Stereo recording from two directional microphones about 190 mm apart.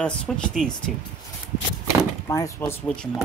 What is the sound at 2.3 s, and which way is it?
Speech, 15° left (ahead or behind).